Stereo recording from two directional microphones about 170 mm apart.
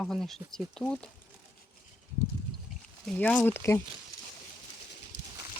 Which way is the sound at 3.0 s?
5° left (ahead or behind).